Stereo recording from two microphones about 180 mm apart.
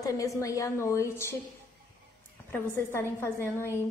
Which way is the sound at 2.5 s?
10° left (ahead or behind).